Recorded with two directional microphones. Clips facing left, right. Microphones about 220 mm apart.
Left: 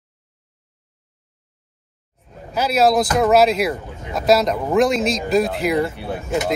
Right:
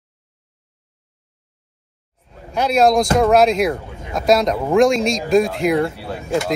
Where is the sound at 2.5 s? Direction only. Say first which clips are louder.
Right 2 dB; 5° left (ahead or behind).